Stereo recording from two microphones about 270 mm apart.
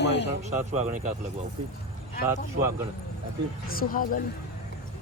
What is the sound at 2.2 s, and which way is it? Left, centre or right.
Speech, centre.